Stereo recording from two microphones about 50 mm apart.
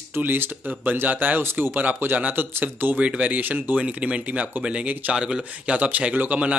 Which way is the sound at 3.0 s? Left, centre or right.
Right.